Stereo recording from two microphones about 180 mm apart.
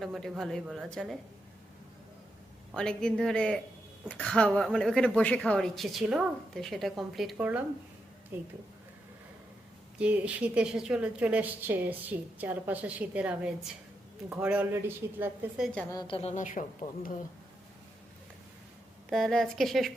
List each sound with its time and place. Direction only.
0.0 s a woman's voice: centre (ahead or behind)
2.7 s a woman's voice: 5° left (ahead or behind); by 8.5 s 10° right (ahead or behind)
10.0 s a woman's voice: 5° right (ahead or behind)
15.6 s a woman's voice: 5° left (ahead or behind)
15.9 s a woman's voice: 25° left (ahead or behind)
16.3 s speech: 45° left (ahead or behind)
19.1 s a woman's voice: centre (ahead or behind)